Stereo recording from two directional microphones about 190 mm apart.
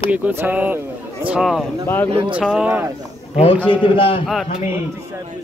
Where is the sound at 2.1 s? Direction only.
30° right (ahead or behind).